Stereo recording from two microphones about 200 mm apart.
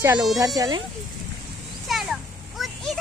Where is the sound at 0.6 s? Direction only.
20° right (ahead or behind).